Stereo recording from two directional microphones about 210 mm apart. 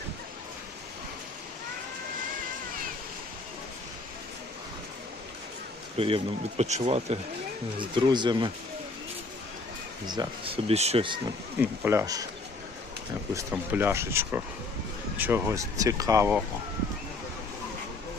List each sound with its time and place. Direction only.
6.0 s speech: 25° right (ahead or behind)
10.1 s speech: 25° right (ahead or behind)
11.6 s speech: 10° right (ahead or behind)
13.3 s speech: 10° right (ahead or behind)